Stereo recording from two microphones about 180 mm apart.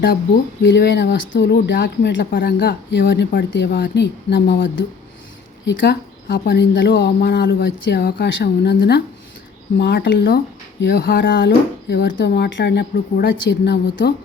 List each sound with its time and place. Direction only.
0.6 s speech: 70° left (ahead or behind)
5.8 s speech: 65° left (ahead or behind)